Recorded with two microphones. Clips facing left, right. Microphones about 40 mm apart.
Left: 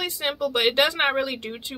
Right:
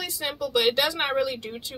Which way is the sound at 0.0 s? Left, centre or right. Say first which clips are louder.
Left 4 dB; left.